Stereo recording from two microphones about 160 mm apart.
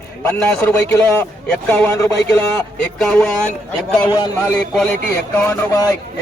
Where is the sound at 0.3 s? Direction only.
10° left (ahead or behind).